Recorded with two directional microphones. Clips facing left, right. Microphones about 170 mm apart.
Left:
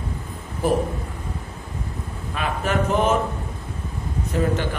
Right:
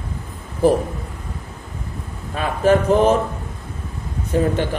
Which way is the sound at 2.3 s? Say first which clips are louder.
Right 7 dB; 35° right (ahead or behind).